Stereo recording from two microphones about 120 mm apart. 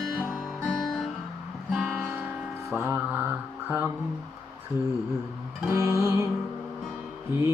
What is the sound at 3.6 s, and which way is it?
Music, 20° right (ahead or behind).